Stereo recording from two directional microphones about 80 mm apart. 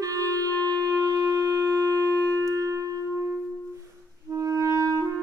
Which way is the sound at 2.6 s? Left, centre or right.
Right.